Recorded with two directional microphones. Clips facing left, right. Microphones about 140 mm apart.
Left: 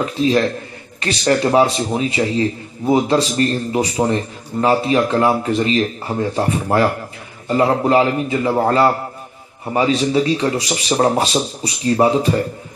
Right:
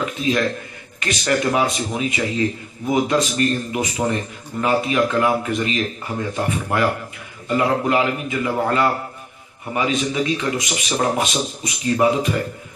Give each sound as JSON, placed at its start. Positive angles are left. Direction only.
{"t": 0.0, "sound": "a man's voice", "side_deg": 35}